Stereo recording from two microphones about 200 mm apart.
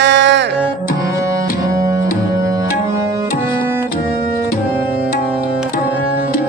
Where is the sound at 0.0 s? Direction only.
60° right (ahead or behind).